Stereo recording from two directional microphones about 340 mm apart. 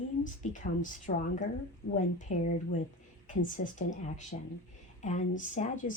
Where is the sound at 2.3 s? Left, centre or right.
Left.